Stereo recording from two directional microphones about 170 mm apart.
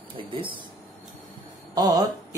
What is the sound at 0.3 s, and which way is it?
Speech, 30° right (ahead or behind).